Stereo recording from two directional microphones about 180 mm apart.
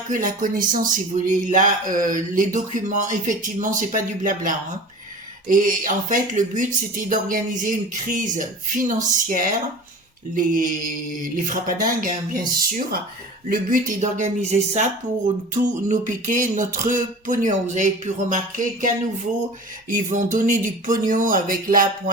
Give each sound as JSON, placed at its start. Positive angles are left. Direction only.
{"t": 0.1, "sound": "speech", "side_deg": -50}
{"t": 13.5, "sound": "speech", "side_deg": -45}